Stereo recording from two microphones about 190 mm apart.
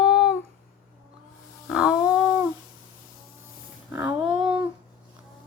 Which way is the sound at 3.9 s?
10° right (ahead or behind).